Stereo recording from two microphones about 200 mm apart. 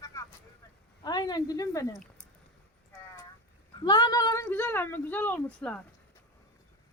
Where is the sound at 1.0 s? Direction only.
20° left (ahead or behind).